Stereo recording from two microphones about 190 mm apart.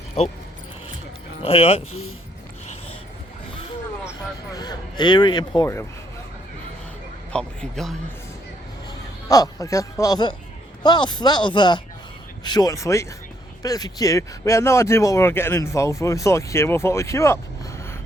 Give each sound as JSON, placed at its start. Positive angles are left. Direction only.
{"t": 1.4, "sound": "speech", "side_deg": 30}
{"t": 1.9, "sound": "speech", "side_deg": 90}
{"t": 4.5, "sound": "speech", "side_deg": 20}
{"t": 7.3, "sound": "a man's voice", "side_deg": 5}
{"t": 9.3, "sound": "speech", "side_deg": 20}